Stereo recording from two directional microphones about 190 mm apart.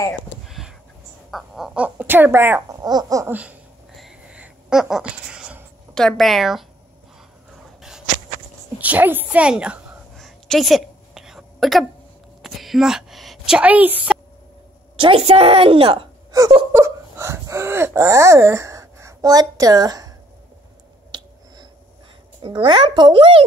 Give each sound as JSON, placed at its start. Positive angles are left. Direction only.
{"t": 0.5, "sound": "a sound", "side_deg": 0}
{"t": 5.9, "sound": "a woman's voice", "side_deg": 0}
{"t": 8.7, "sound": "a sound", "side_deg": -10}
{"t": 15.0, "sound": "speech", "side_deg": -30}
{"t": 21.1, "sound": "finger snapping", "side_deg": -20}
{"t": 22.4, "sound": "a child's voice", "side_deg": -25}